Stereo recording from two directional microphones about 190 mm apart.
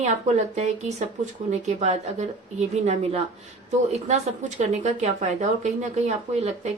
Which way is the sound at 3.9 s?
35° right (ahead or behind).